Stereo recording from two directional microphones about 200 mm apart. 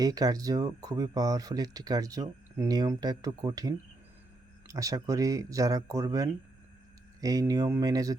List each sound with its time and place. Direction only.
0.0 s speech: 20° right (ahead or behind)